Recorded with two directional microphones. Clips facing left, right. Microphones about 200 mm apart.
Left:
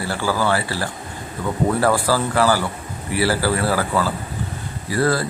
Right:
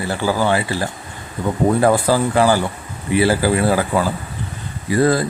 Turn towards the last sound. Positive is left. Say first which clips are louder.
# right 4 dB
turn(degrees=-20)  # may be behind; listen again after turning